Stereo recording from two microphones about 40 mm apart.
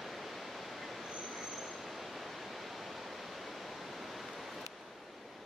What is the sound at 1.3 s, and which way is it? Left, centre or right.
Vehicle, centre.